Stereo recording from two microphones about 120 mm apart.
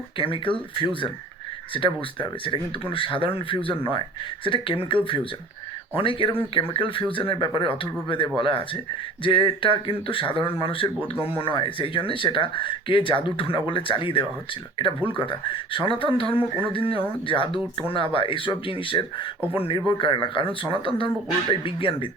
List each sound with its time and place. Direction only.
0.2 s speech: 45° left (ahead or behind)